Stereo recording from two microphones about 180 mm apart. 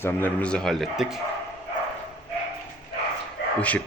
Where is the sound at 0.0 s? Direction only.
10° left (ahead or behind).